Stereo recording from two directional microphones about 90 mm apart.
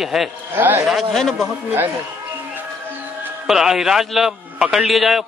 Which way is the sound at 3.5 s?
5° right (ahead or behind).